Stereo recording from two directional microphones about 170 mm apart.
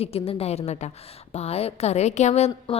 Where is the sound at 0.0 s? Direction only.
35° left (ahead or behind).